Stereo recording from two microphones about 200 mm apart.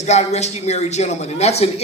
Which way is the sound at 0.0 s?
35° left (ahead or behind).